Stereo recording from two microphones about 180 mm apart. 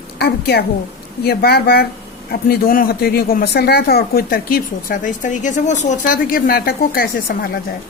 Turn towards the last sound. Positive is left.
turn(degrees=55)  # may be behind; listen again after turning